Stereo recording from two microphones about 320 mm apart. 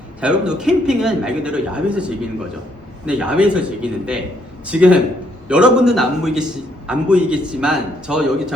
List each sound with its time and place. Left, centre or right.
0.2 s a man's voice: centre